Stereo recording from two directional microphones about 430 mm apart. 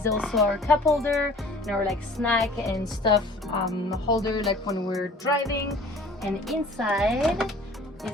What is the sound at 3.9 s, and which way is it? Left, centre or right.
Music, centre.